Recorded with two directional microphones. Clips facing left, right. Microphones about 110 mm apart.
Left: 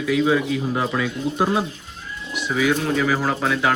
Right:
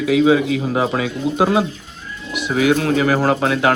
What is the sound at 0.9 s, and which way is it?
Speech, 85° right.